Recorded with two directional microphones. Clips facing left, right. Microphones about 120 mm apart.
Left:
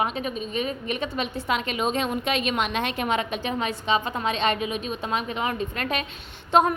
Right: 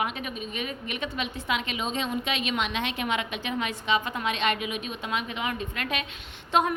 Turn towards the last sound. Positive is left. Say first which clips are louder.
# left 5 dB
turn(degrees=35)  # may be behind; listen again after turning